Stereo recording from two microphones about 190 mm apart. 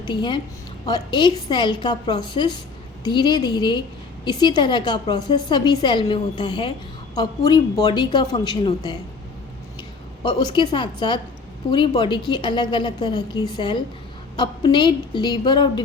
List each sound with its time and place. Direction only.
0.0 s a woman's voice: 25° left (ahead or behind)
10.2 s a woman's voice: 25° left (ahead or behind)